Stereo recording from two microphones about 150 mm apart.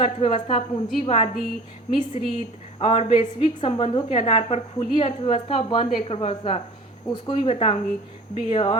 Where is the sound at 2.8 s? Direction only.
45° left (ahead or behind).